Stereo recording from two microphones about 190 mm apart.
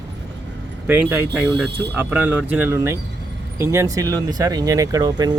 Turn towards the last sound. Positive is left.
turn(degrees=-20)  # may be behind; listen again after turning